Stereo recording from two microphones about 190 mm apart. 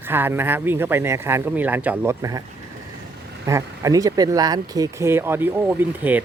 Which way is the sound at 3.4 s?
15° right (ahead or behind).